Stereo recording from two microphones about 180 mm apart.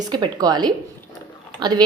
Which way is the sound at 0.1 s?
20° right (ahead or behind).